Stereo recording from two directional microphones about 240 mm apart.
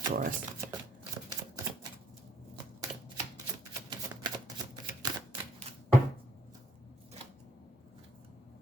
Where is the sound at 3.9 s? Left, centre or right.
Centre.